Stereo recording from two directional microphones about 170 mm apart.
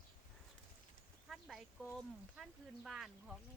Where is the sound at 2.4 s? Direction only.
Centre (ahead or behind).